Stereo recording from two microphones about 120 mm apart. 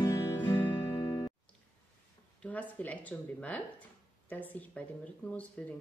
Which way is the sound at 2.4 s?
15° left (ahead or behind).